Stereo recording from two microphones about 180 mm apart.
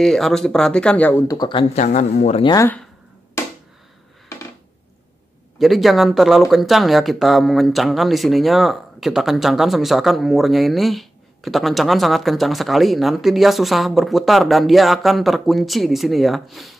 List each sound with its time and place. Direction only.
0.0 s speech: centre (ahead or behind)
1.2 s speech: 20° left (ahead or behind); by 2.4 s 40° left (ahead or behind)
2.4 s speech: 20° left (ahead or behind)
5.6 s speech: centre (ahead or behind)